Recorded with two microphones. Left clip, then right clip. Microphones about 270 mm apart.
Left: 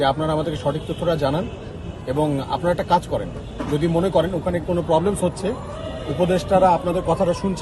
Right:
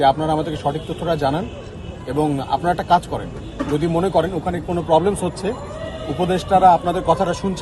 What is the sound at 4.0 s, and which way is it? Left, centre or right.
Speech, centre.